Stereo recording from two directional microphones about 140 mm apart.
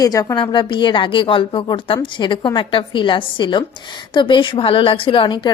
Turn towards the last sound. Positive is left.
turn(degrees=35)  # may be behind; listen again after turning